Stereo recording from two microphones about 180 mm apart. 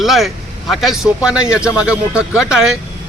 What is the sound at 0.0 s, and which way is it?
Speech, centre (ahead or behind).